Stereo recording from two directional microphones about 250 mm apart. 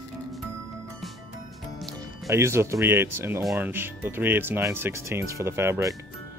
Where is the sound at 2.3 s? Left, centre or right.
Centre.